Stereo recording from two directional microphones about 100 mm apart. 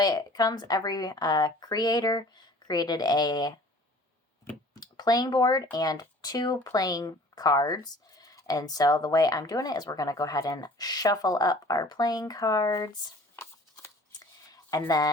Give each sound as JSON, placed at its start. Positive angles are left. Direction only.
{"t": 0.0, "sound": "speech", "side_deg": 40}
{"t": 4.7, "sound": "speech", "side_deg": 40}
{"t": 13.3, "sound": "shuffling cards", "side_deg": 25}
{"t": 14.1, "sound": "a sound", "side_deg": 40}